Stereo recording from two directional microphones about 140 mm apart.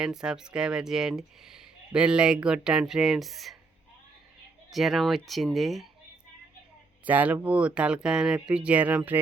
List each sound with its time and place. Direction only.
0.0 s speech: 5° right (ahead or behind)
4.7 s speech: centre (ahead or behind)
7.0 s speech: 10° right (ahead or behind)